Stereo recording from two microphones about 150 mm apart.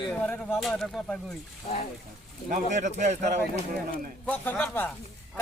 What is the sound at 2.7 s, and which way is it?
Speech, 55° right (ahead or behind).